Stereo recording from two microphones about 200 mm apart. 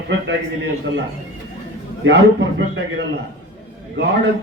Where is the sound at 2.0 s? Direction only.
65° right (ahead or behind).